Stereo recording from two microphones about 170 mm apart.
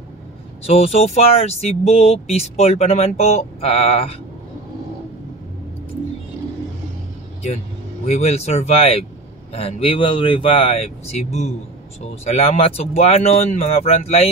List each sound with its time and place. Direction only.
0.7 s speech: 35° left (ahead or behind)
8.1 s speech: 40° left (ahead or behind)